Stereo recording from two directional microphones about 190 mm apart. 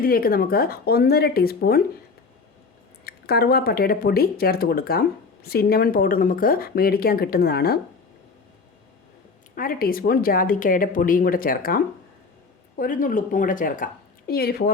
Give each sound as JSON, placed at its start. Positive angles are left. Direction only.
{"t": 0.0, "sound": "speech", "side_deg": 50}
{"t": 3.0, "sound": "speech", "side_deg": 55}
{"t": 9.6, "sound": "speech", "side_deg": 50}
{"t": 12.8, "sound": "speech", "side_deg": 45}